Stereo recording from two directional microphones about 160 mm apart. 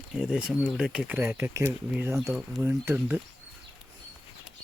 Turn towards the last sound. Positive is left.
turn(degrees=-15)  # may be behind; listen again after turning